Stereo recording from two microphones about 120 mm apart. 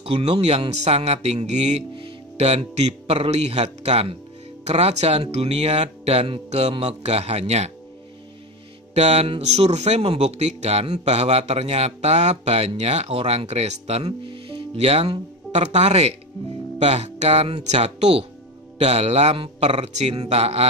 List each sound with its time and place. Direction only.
0.0 s a man's voice: 55° right (ahead or behind); by 1.9 s 70° right (ahead or behind)
2.0 s a man's voice: 55° right (ahead or behind)
8.9 s a man's voice: 60° right (ahead or behind)